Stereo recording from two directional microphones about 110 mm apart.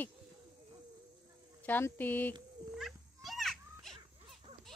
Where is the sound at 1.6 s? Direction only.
15° left (ahead or behind).